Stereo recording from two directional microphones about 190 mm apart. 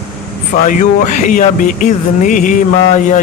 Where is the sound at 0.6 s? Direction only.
40° left (ahead or behind).